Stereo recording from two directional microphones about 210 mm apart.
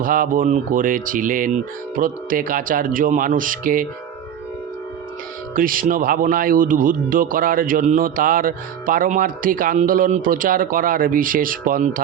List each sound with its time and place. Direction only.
0.0 s speech: 40° right (ahead or behind)
5.5 s speech: 40° right (ahead or behind)